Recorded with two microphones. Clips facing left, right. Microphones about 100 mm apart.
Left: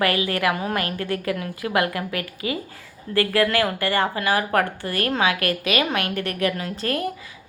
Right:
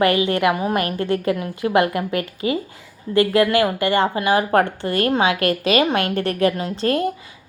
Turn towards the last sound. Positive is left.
turn(degrees=-30)  # may be behind; listen again after turning